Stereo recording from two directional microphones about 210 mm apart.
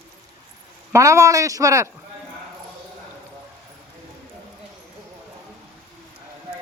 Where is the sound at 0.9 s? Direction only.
15° right (ahead or behind).